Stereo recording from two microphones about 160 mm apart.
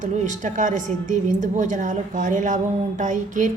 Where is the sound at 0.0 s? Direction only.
50° right (ahead or behind).